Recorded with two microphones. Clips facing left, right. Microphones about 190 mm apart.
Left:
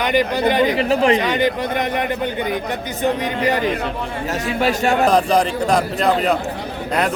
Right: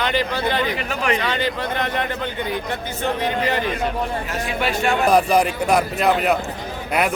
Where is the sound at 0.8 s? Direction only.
30° left (ahead or behind).